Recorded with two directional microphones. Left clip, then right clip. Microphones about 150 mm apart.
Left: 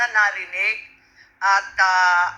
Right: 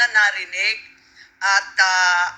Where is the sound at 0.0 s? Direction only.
15° right (ahead or behind).